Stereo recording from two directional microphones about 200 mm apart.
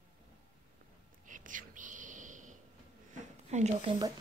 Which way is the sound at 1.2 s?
40° right (ahead or behind).